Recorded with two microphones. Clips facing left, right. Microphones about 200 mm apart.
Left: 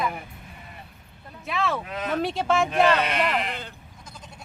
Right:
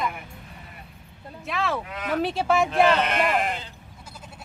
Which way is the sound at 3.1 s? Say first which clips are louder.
Right 2 dB; 45° right (ahead or behind).